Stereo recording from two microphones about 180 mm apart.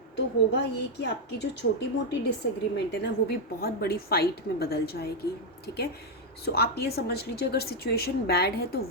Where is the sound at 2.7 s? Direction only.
65° left (ahead or behind).